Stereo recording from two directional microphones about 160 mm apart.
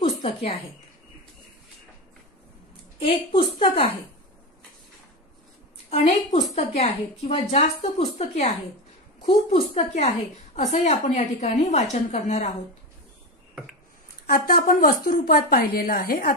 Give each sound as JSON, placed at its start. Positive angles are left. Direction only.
{"t": 0.0, "sound": "a sound", "side_deg": 40}
{"t": 3.0, "sound": "a woman's voice", "side_deg": 35}
{"t": 6.5, "sound": "a woman's voice", "side_deg": 40}
{"t": 14.3, "sound": "a woman's voice", "side_deg": 60}